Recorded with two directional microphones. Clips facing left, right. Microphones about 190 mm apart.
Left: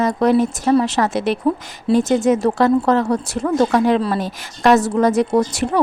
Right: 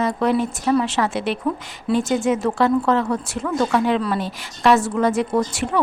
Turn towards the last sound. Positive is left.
turn(degrees=40)  # may be behind; listen again after turning